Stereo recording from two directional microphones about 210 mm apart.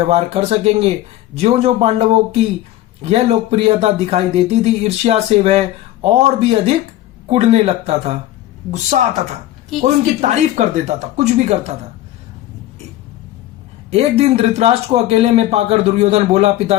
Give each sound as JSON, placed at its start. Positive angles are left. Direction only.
{"t": 0.0, "sound": "speech", "side_deg": -30}
{"t": 13.9, "sound": "speech", "side_deg": -30}